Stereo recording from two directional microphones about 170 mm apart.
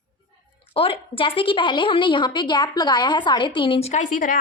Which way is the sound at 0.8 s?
30° left (ahead or behind).